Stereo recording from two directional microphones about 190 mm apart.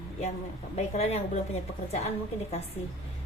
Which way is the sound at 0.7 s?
35° left (ahead or behind).